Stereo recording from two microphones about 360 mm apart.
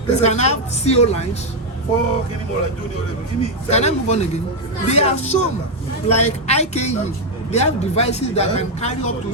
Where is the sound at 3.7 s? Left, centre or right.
Centre.